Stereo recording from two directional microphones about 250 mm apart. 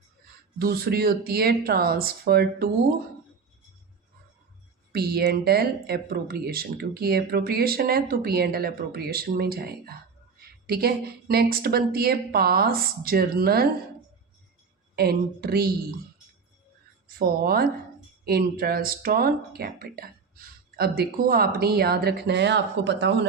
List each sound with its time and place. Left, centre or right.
0.6 s speech: right
4.9 s speech: right
14.9 s speech: right
17.2 s speech: right